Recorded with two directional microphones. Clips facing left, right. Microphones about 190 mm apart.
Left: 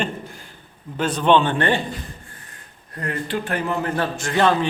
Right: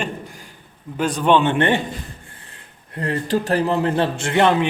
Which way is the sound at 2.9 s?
30° right (ahead or behind).